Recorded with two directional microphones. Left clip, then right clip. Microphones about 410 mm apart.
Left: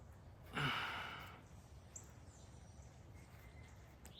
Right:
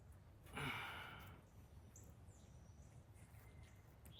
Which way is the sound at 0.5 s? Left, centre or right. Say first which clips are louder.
Left 7 dB; left.